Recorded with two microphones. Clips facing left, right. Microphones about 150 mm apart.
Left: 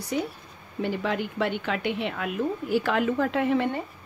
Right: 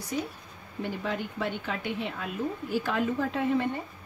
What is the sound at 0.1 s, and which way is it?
A woman's voice, 80° left.